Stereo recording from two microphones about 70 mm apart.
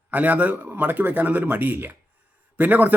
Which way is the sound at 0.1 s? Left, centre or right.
Right.